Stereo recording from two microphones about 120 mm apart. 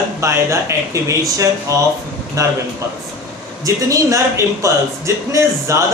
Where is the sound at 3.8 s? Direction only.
25° right (ahead or behind).